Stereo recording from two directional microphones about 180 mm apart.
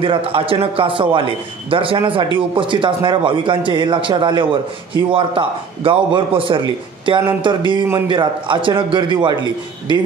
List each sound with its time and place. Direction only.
0.0 s a man's voice: 30° right (ahead or behind)